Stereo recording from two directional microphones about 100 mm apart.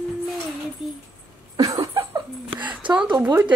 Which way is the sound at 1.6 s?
35° right (ahead or behind).